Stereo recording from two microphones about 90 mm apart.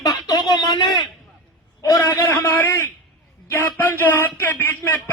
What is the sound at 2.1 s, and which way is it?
Speech, 25° left (ahead or behind).